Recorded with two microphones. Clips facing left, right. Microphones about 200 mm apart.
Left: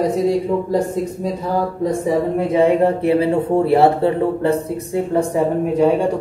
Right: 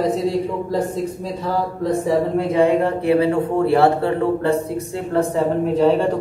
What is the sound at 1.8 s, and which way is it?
Speech, 15° left (ahead or behind).